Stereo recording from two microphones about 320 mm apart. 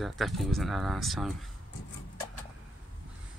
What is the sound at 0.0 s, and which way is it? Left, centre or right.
Speech, centre.